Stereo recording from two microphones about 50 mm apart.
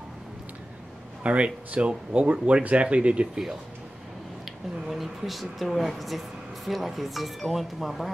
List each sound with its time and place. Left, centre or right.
1.2 s speech: right
4.8 s speech: centre